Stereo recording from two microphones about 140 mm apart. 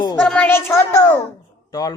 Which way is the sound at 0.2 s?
10° left (ahead or behind).